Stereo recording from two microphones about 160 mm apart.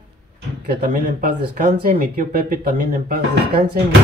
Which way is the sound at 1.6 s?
60° right (ahead or behind).